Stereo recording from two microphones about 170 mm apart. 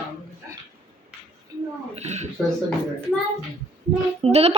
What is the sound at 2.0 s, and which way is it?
Speech, 40° right (ahead or behind).